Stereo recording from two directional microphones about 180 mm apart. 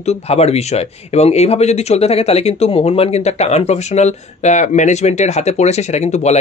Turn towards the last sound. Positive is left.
turn(degrees=40)  # may be behind; listen again after turning